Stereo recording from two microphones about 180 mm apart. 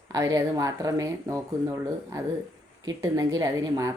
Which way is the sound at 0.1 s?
20° right (ahead or behind).